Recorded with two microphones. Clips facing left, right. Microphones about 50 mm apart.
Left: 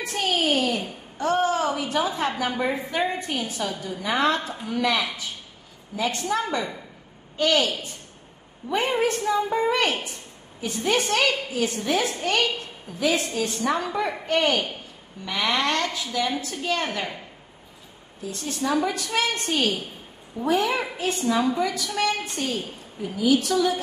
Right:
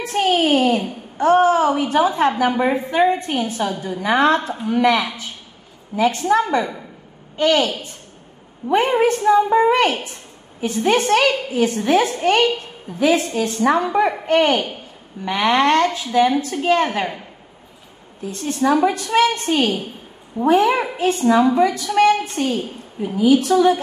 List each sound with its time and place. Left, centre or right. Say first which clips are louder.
0.0 s a woman's voice: right 7 dB; right
18.2 s a woman's voice: right 8 dB; right